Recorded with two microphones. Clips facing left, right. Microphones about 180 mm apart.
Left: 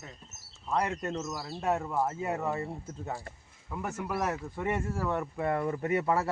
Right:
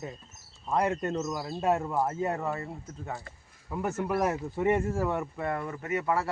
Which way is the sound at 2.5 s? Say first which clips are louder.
Left 1 dB; 20° left (ahead or behind).